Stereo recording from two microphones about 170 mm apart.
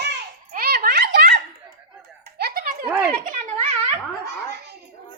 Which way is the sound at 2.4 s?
65° right (ahead or behind).